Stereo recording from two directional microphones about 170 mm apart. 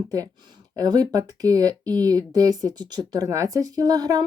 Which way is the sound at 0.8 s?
20° right (ahead or behind).